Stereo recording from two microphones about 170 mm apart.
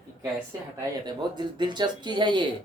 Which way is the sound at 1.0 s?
25° right (ahead or behind).